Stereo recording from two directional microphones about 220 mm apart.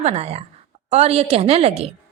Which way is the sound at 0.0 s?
30° right (ahead or behind).